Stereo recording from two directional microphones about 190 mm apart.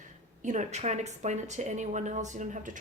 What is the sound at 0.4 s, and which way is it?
Speech, 40° right (ahead or behind).